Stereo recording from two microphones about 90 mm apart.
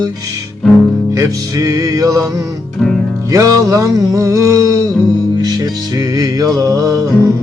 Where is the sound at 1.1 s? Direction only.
40° right (ahead or behind).